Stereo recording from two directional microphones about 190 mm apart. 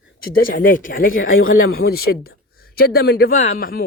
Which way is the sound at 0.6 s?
45° left (ahead or behind).